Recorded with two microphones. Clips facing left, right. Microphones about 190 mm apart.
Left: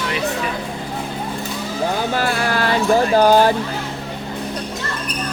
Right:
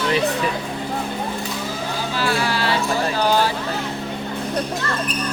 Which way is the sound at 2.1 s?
50° left (ahead or behind).